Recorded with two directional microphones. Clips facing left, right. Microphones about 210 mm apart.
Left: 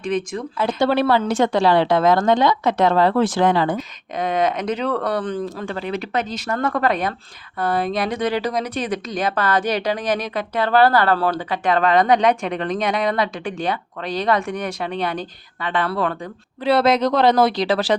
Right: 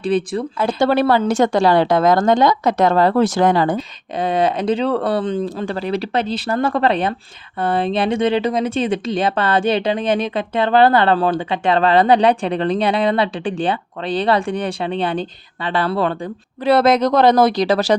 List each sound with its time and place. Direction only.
0.0 s speech: 35° right (ahead or behind)
0.8 s a woman's voice: 45° right (ahead or behind)
3.8 s speech: 30° right (ahead or behind)
5.6 s speech: 35° right (ahead or behind)
16.6 s a woman's voice: 45° right (ahead or behind)